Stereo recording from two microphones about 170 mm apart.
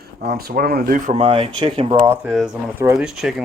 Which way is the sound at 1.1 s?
35° right (ahead or behind).